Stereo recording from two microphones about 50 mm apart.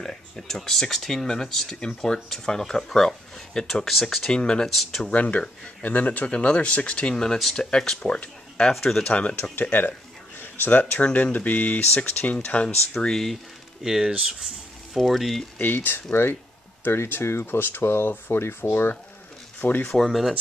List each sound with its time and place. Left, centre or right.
0.0 s speech: centre
5.1 s speech: left
8.7 s speech: centre
9.0 s speech: left
9.4 s speech: left
13.8 s speech: centre
15.0 s speech: centre
15.6 s speech: left
19.6 s speech: left
20.0 s speech: centre